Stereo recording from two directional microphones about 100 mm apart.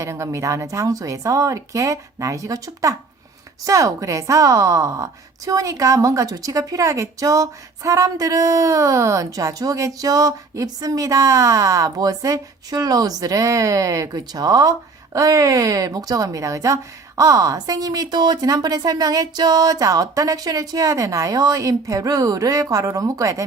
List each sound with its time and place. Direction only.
0.0 s a woman's voice: 30° right (ahead or behind)